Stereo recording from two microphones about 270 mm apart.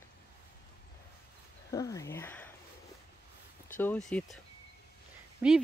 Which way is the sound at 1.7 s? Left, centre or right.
Centre.